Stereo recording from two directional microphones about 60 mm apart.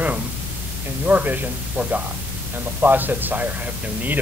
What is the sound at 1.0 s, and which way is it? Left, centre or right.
A woman's voice, right.